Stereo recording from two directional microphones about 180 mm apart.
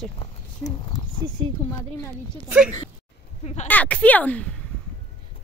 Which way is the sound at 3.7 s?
10° left (ahead or behind).